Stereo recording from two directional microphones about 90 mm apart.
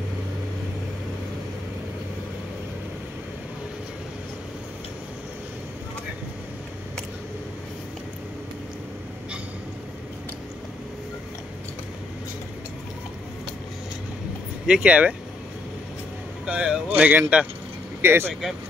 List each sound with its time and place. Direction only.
14.7 s speech: 15° right (ahead or behind)
16.4 s speech: 10° right (ahead or behind); by 18.3 s 25° right (ahead or behind)